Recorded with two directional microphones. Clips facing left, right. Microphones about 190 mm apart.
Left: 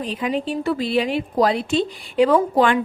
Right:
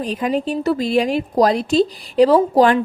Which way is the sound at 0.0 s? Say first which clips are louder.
Right 3 dB; 45° right (ahead or behind).